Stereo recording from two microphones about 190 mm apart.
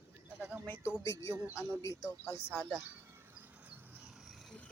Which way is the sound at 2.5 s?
15° right (ahead or behind).